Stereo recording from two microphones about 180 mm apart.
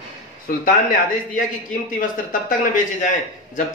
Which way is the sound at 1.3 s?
45° left (ahead or behind).